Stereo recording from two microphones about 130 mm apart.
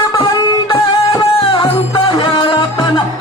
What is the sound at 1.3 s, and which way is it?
Music, 40° left (ahead or behind).